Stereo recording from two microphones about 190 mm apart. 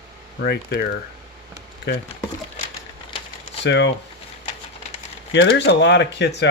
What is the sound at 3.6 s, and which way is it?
Speech, 65° left (ahead or behind).